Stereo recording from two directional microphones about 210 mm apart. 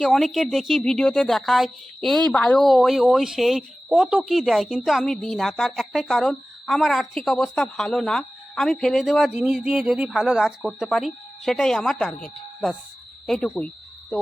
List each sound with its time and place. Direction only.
0.0 s a woman's voice: centre (ahead or behind)